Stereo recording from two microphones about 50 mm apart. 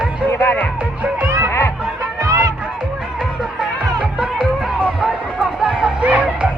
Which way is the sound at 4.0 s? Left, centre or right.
Centre.